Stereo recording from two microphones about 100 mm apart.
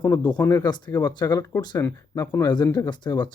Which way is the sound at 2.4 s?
45° left (ahead or behind).